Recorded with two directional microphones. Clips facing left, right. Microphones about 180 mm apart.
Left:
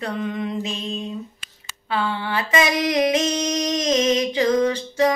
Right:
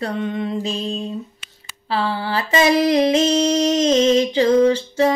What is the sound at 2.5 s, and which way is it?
Female singing, 30° right (ahead or behind).